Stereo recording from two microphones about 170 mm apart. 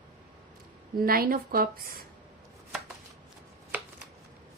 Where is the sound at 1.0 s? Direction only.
60° right (ahead or behind).